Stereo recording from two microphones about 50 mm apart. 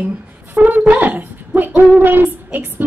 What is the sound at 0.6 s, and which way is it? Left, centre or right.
A woman's voice, right.